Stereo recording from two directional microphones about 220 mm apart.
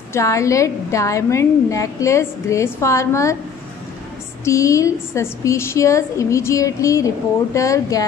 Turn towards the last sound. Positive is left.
turn(degrees=15)  # may be behind; listen again after turning